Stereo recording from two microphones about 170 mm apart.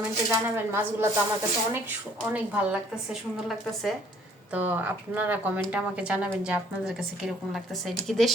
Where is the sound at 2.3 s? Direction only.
5° right (ahead or behind).